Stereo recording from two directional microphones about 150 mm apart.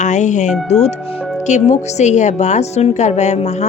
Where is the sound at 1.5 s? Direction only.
50° left (ahead or behind).